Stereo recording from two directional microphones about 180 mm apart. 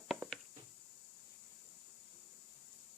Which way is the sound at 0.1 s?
Centre (ahead or behind).